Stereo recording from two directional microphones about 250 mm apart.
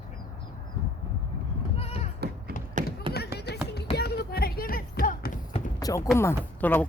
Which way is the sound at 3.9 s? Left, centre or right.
Left.